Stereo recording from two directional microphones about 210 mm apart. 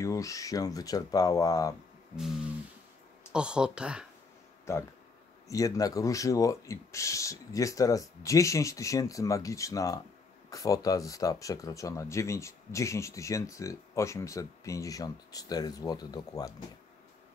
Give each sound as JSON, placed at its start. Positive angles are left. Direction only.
{"t": 0.0, "sound": "speech", "side_deg": 15}
{"t": 3.3, "sound": "speech", "side_deg": -5}
{"t": 4.7, "sound": "speech", "side_deg": 10}